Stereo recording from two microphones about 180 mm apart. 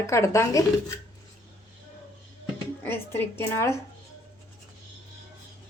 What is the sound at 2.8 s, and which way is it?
Speech, 15° left (ahead or behind).